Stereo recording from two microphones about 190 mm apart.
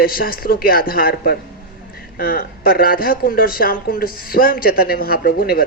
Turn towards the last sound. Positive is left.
turn(degrees=50)  # may be behind; listen again after turning